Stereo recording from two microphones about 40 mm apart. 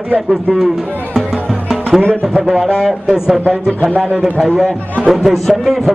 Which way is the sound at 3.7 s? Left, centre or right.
Left.